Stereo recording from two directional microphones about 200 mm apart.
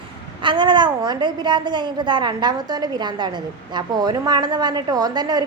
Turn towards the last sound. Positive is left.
turn(degrees=-20)  # may be behind; listen again after turning